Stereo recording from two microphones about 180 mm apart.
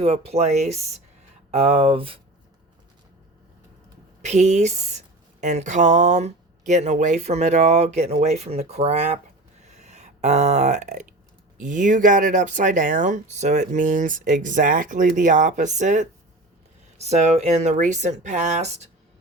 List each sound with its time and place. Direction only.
0.0 s speech: 35° right (ahead or behind)
4.2 s speech: 40° right (ahead or behind)
9.6 s a sound: 40° right (ahead or behind)
11.6 s speech: 45° right (ahead or behind)